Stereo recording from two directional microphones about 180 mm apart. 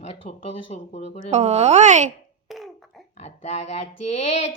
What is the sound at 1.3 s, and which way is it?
Speech, 35° right (ahead or behind).